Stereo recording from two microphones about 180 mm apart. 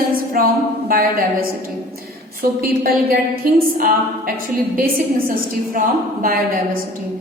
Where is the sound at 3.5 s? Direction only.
50° right (ahead or behind).